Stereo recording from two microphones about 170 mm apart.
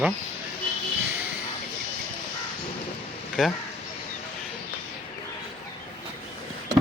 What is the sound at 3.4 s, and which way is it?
Speech, centre (ahead or behind).